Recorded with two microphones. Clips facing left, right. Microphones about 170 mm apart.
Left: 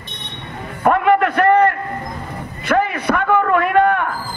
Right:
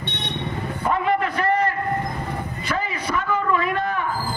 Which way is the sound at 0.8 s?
60° left (ahead or behind).